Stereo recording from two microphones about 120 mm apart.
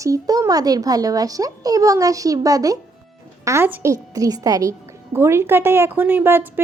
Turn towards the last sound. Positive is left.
turn(degrees=-20)  # may be behind; listen again after turning